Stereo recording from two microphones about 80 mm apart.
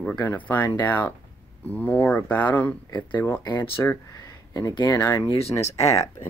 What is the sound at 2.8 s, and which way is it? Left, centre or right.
Speech, left.